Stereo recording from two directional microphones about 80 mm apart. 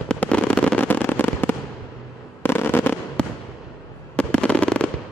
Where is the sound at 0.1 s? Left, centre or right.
Centre.